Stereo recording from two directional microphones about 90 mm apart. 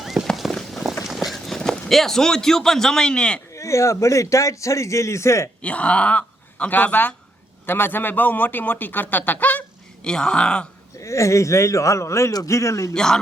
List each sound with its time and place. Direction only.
0.0 s horse: 5° right (ahead or behind)
1.0 s speech: centre (ahead or behind)
3.5 s a man's voice: 35° left (ahead or behind)
5.6 s speech: 15° left (ahead or behind)
10.0 s speech: 10° left (ahead or behind)
11.0 s a man's voice: 35° left (ahead or behind)
12.9 s speech: 5° left (ahead or behind)